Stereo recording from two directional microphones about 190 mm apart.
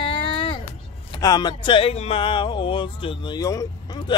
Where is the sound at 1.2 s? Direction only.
20° left (ahead or behind).